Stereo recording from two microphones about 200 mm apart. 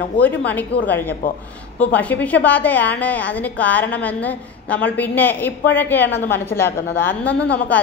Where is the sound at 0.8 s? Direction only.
10° left (ahead or behind).